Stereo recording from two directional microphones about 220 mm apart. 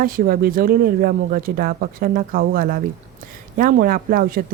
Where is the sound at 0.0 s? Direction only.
40° right (ahead or behind).